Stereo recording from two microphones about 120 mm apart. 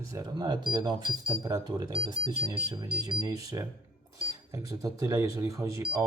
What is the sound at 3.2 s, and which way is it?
Speech, 30° right (ahead or behind).